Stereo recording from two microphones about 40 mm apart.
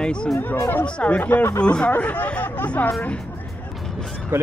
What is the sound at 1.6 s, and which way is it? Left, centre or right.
Speech, left.